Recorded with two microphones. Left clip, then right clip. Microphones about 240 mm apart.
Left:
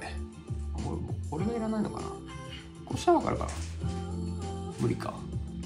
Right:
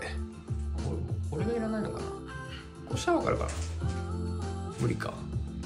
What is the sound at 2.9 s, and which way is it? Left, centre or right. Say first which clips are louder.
Speech: left 2 dB; centre.